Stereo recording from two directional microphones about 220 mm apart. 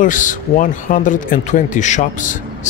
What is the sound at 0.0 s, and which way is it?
Speech, 35° left (ahead or behind).